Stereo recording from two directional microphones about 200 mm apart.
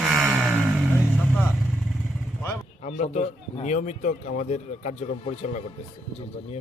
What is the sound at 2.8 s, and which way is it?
Speech, 35° left (ahead or behind).